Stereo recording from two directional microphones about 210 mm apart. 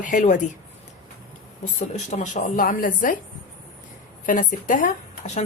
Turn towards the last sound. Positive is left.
turn(degrees=35)  # may be behind; listen again after turning